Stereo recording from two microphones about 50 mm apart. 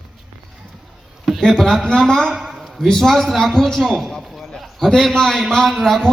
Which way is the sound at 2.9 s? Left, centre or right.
Centre.